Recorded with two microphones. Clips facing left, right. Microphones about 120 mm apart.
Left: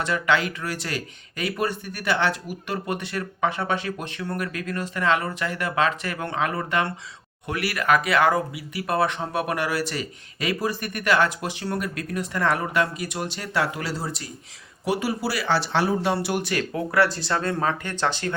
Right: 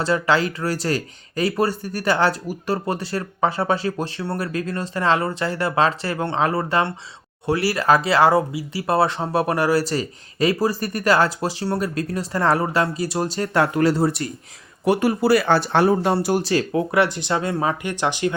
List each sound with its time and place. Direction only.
0.0 s speech: 35° right (ahead or behind); by 16.1 s 50° right (ahead or behind)
16.1 s speech: 35° right (ahead or behind); by 18.3 s 15° right (ahead or behind)